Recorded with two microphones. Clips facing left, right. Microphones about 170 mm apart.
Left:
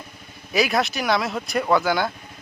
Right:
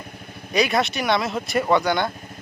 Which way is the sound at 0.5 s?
Centre (ahead or behind).